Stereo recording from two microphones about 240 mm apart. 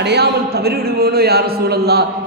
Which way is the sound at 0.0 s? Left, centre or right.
Right.